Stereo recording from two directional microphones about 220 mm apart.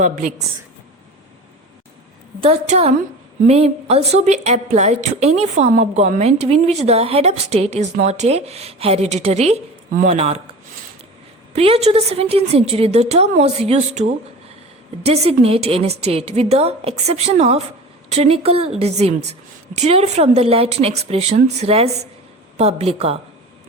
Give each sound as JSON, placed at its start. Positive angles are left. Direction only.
{"t": 0.0, "sound": "a woman's voice", "side_deg": -35}
{"t": 2.4, "sound": "a woman's voice", "side_deg": -30}
{"t": 11.5, "sound": "a woman's voice", "side_deg": -25}